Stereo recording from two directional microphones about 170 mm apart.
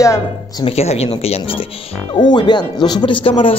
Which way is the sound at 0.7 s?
35° left (ahead or behind).